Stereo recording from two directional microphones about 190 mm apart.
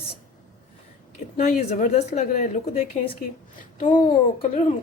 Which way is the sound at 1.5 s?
35° left (ahead or behind).